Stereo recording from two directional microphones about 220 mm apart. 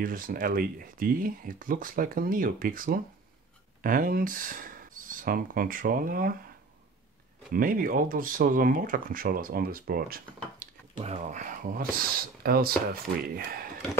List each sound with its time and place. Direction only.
0.0 s speech: 40° right (ahead or behind)
7.5 s speech: 40° right (ahead or behind)
11.0 s speech: 30° right (ahead or behind)